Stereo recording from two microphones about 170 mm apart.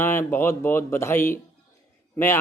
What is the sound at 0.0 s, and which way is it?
A man's voice, 15° left (ahead or behind).